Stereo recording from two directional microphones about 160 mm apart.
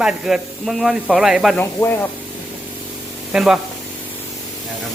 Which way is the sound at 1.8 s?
20° left (ahead or behind).